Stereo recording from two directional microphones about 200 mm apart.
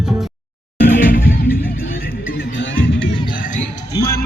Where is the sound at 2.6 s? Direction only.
65° left (ahead or behind).